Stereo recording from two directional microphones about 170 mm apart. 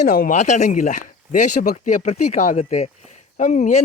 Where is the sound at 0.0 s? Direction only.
55° left (ahead or behind).